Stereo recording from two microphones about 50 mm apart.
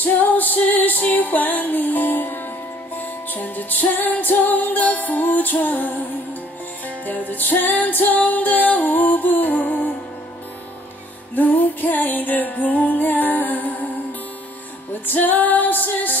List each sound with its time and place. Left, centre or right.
0.0 s music: left
7.1 s music: left
11.3 s music: left
15.0 s music: left